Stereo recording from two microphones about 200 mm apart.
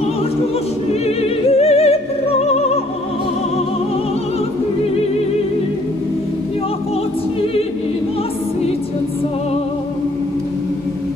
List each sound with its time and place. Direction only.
1.6 s opera: 30° left (ahead or behind)